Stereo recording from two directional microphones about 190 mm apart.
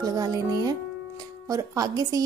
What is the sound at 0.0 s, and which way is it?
A woman's voice, 20° right (ahead or behind).